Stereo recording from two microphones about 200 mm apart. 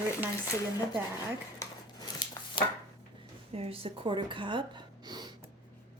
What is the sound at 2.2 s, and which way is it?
Chopping, 20° left (ahead or behind).